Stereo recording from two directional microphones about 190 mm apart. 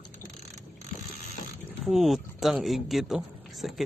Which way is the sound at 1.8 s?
Centre (ahead or behind).